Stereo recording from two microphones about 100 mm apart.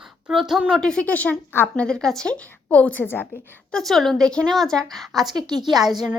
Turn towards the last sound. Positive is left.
turn(degrees=0)  # may be behind; listen again after turning